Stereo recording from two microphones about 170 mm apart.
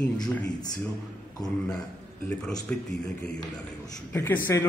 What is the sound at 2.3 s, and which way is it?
A man's voice, 5° left (ahead or behind).